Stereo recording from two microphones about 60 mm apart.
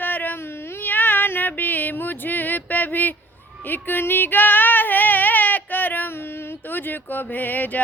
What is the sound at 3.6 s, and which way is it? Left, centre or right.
Female singing, left.